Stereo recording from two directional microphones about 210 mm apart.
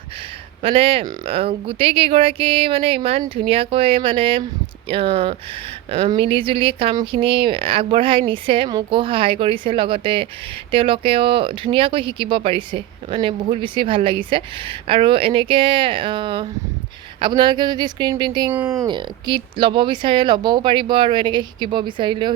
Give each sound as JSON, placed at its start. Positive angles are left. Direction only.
{"t": 0.6, "sound": "speech", "side_deg": -25}